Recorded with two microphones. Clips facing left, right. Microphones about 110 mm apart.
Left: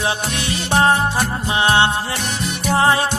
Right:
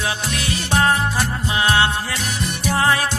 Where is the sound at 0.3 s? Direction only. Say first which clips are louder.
Left 1 dB; 30° left (ahead or behind).